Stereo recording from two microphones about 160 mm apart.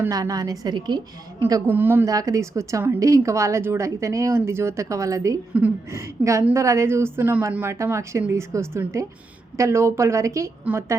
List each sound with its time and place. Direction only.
0.0 s a woman's voice: 20° right (ahead or behind)